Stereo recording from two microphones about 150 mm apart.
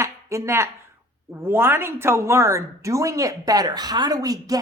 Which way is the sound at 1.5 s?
15° right (ahead or behind).